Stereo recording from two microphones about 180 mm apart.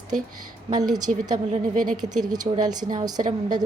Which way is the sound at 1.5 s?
45° right (ahead or behind).